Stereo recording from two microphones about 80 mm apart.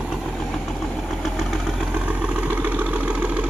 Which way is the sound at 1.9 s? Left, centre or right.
Centre.